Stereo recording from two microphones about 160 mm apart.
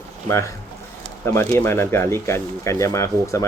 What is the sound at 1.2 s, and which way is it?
Speech, 15° left (ahead or behind).